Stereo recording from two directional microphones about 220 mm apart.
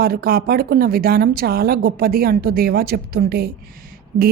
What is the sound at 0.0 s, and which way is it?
A woman's voice, 45° right (ahead or behind).